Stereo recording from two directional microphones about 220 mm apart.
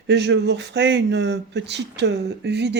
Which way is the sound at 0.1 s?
50° right (ahead or behind).